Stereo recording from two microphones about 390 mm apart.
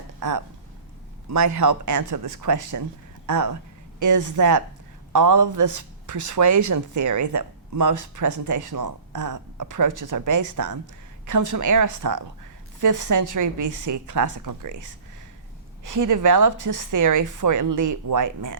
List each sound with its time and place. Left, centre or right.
0.2 s speech: right